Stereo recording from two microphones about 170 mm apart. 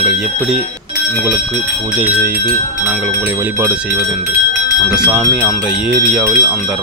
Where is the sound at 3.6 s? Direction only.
10° right (ahead or behind).